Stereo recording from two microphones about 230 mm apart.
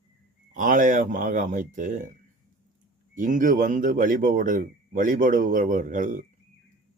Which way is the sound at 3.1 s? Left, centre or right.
Right.